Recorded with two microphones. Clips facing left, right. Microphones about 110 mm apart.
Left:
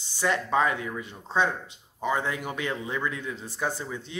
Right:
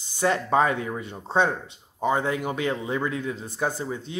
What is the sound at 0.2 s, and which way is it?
Speech, 20° right (ahead or behind).